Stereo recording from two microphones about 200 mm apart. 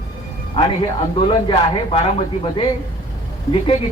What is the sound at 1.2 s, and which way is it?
Speech, 25° left (ahead or behind).